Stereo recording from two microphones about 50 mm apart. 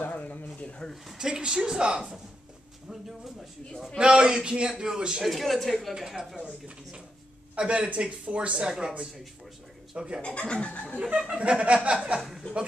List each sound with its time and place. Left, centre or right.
0.0 s a sound: left
1.1 s a man's voice: centre
2.9 s speech: centre
4.0 s a man's voice: centre
5.2 s a man's voice: centre
7.5 s a man's voice: right
9.9 s a man's voice: centre
10.2 s speech: left
11.0 s speech: centre